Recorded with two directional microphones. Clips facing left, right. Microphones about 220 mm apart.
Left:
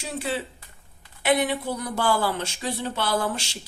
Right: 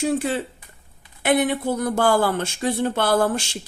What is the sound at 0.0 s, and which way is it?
A woman's voice, 50° right (ahead or behind).